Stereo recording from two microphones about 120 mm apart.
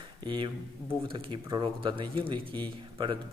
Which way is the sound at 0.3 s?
40° right (ahead or behind).